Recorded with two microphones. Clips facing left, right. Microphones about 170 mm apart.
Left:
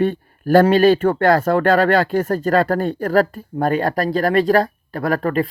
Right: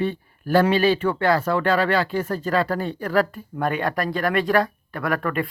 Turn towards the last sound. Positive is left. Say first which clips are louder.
# left 5 dB
turn(degrees=35)  # may be behind; listen again after turning